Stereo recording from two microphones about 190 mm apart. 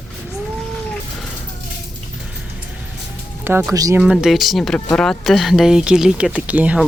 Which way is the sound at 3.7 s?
20° right (ahead or behind).